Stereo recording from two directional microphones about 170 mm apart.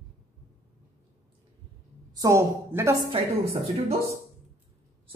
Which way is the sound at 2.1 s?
15° right (ahead or behind).